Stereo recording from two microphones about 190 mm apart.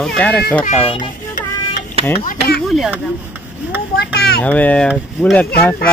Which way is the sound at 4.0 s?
55° left (ahead or behind).